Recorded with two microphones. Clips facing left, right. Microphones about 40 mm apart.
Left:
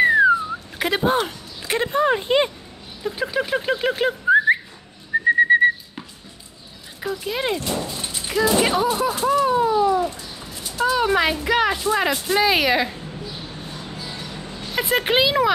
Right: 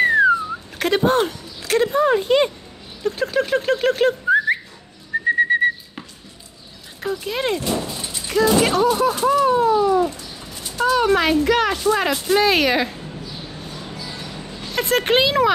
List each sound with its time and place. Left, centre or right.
0.0 s a sound: centre
0.7 s speech: centre
1.6 s speech: centre
3.0 s a sound: centre
5.4 s whistling: centre
7.1 s speech: centre
8.1 s speech: centre
14.7 s speech: centre